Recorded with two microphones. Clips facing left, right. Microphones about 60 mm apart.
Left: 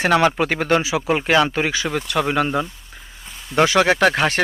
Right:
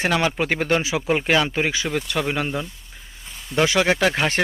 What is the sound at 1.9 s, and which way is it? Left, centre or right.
Speech, centre.